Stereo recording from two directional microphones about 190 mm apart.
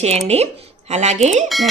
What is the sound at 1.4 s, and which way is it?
Speech, centre (ahead or behind).